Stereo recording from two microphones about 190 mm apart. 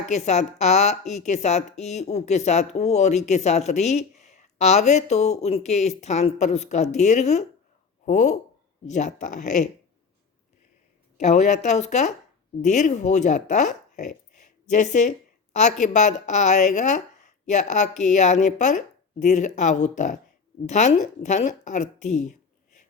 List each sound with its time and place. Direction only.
0.1 s a woman's voice: 35° left (ahead or behind)
11.2 s a woman's voice: 35° left (ahead or behind)
14.3 s a sound: 40° left (ahead or behind)
15.5 s a woman's voice: 40° left (ahead or behind)